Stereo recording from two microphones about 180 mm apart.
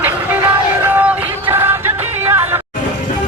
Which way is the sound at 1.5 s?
10° right (ahead or behind).